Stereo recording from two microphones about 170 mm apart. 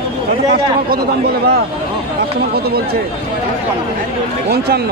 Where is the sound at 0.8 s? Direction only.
65° right (ahead or behind).